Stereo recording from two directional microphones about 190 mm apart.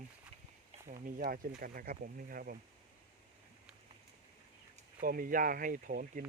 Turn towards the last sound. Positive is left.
turn(degrees=-45)  # may be behind; listen again after turning